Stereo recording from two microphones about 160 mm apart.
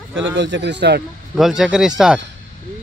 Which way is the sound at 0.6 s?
90° right.